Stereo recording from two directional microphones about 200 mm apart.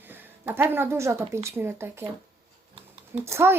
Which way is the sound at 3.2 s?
10° right (ahead or behind).